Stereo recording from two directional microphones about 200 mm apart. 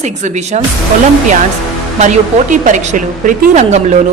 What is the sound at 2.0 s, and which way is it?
A woman's voice, 40° right (ahead or behind).